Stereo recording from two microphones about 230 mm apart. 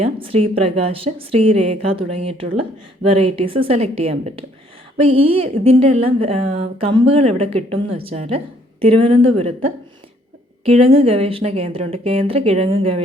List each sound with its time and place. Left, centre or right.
0.0 s a woman's voice: right
10.7 s a woman's voice: right